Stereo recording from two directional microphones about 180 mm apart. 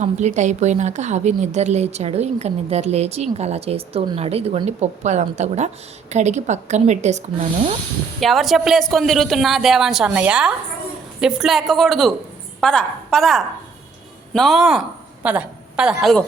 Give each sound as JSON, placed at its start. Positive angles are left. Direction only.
{"t": 0.0, "sound": "a woman's voice", "side_deg": -40}
{"t": 8.2, "sound": "a woman's voice", "side_deg": 0}